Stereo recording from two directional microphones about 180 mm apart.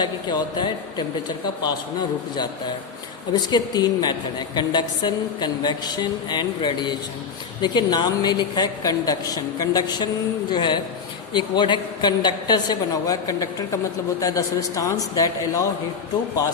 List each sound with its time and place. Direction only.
0.0 s a woman's voice: 25° left (ahead or behind)
3.5 s a woman's voice: 20° left (ahead or behind)